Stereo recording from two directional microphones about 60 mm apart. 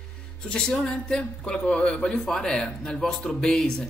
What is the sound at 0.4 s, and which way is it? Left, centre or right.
Speech, centre.